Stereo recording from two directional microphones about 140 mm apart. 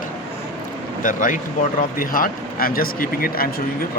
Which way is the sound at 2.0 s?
90° left.